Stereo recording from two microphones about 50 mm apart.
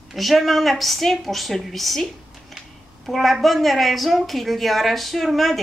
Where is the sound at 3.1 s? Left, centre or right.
Centre.